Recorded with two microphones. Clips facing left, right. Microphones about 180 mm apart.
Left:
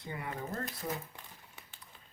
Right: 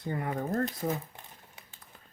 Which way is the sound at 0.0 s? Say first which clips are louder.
Right 7 dB; 45° right (ahead or behind).